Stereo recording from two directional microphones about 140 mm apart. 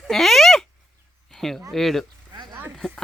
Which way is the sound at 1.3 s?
Centre (ahead or behind).